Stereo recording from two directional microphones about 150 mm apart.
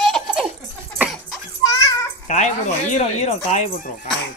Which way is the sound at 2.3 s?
50° left (ahead or behind).